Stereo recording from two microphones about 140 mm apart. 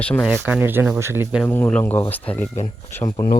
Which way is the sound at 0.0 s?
10° left (ahead or behind).